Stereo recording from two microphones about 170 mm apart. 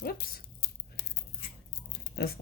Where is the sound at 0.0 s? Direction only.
60° left (ahead or behind).